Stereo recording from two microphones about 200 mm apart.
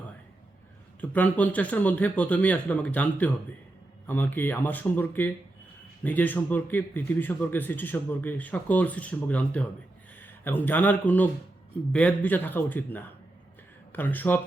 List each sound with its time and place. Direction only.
1.1 s a man's voice: 10° left (ahead or behind)